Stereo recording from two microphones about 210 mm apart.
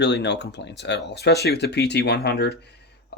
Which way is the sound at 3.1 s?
50° left (ahead or behind).